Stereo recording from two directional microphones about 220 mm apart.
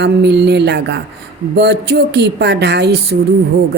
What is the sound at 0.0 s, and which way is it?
Speech, 50° right (ahead or behind).